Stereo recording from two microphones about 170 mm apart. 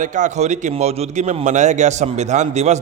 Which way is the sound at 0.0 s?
45° right (ahead or behind).